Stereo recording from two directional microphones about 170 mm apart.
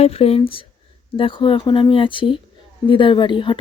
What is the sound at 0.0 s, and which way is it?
Speech, 35° left (ahead or behind).